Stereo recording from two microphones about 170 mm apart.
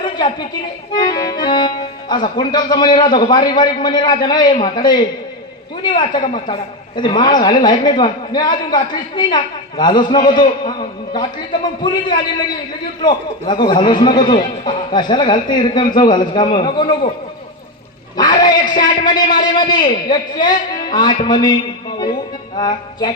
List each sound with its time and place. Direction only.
0.0 s a sound: 25° left (ahead or behind)
0.9 s a man's voice: 25° left (ahead or behind)
18.2 s a man's voice: 25° left (ahead or behind)